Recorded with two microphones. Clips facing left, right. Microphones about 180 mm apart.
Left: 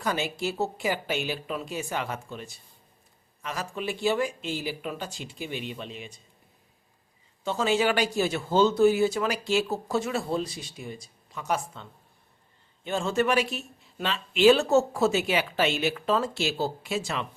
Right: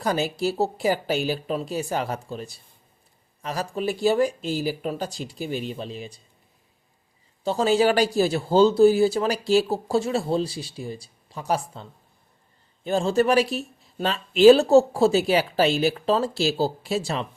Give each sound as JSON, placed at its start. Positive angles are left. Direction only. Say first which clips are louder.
{"t": 0.0, "sound": "speech", "louder": "right 5 dB", "side_deg": -35}
{"t": 7.4, "sound": "speech", "louder": "right 5 dB", "side_deg": -35}